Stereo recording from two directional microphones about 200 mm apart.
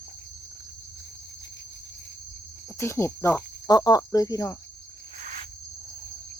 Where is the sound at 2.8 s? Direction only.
15° left (ahead or behind).